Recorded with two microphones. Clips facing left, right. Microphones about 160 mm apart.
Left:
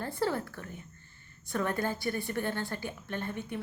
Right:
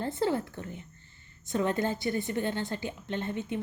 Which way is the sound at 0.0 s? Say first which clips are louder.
Right 3 dB; 20° right (ahead or behind).